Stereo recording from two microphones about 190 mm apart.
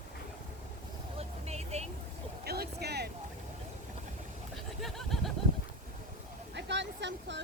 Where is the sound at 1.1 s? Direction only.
35° right (ahead or behind).